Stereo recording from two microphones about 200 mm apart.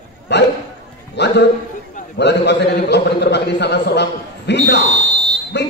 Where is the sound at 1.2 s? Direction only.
60° left (ahead or behind).